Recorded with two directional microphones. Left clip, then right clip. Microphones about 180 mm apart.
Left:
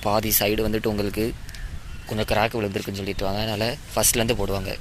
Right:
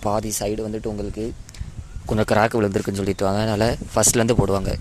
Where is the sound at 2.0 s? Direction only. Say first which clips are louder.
Right 4 dB; 35° right (ahead or behind).